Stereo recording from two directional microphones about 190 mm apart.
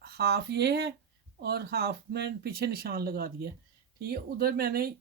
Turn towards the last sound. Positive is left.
turn(degrees=-50)  # may be behind; listen again after turning